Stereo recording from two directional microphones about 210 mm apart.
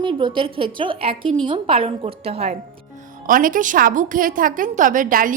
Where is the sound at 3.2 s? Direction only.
40° right (ahead or behind).